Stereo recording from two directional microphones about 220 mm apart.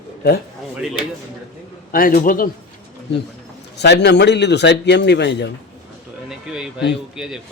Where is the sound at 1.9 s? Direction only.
40° left (ahead or behind).